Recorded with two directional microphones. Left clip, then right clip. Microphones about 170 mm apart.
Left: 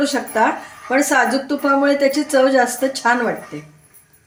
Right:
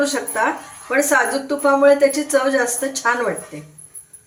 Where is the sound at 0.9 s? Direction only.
90° left.